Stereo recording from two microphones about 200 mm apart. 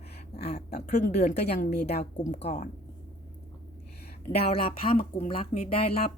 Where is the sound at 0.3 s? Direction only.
35° left (ahead or behind).